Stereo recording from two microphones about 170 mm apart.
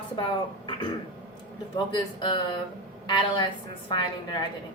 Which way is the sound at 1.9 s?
30° left (ahead or behind).